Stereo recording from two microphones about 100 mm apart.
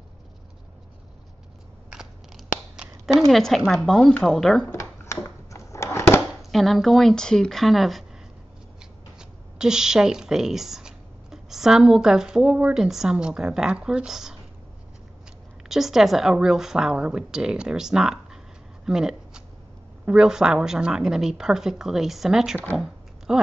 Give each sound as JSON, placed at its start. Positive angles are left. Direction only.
{"t": 1.9, "sound": "crunch", "side_deg": -5}
{"t": 3.2, "sound": "a woman's voice", "side_deg": 0}
{"t": 4.7, "sound": "a sound", "side_deg": 30}
{"t": 6.5, "sound": "a woman's voice", "side_deg": 0}
{"t": 9.2, "sound": "speech", "side_deg": -5}
{"t": 15.7, "sound": "a woman's voice", "side_deg": -5}
{"t": 18.9, "sound": "shuffling cards", "side_deg": -5}
{"t": 20.1, "sound": "a woman's voice", "side_deg": -5}
{"t": 22.8, "sound": "a sound", "side_deg": -5}